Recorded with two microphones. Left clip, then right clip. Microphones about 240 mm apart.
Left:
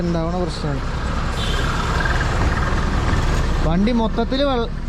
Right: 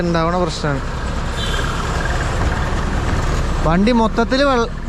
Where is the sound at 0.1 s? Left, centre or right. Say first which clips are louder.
Right 6 dB; centre.